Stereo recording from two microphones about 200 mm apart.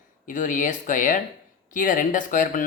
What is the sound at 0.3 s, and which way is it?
Speech, 40° left (ahead or behind).